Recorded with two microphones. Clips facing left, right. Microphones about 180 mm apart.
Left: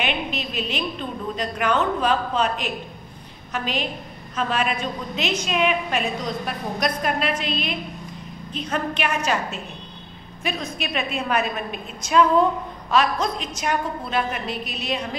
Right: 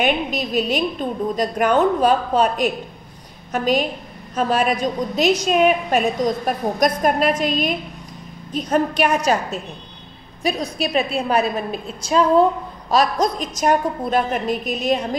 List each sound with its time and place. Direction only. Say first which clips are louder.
0.0 s a woman's voice: right 6 dB; 45° right (ahead or behind)